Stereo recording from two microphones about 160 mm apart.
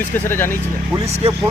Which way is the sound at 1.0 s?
40° right (ahead or behind).